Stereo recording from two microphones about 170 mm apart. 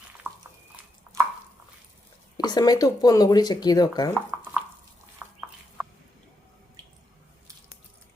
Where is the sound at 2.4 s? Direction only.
20° left (ahead or behind).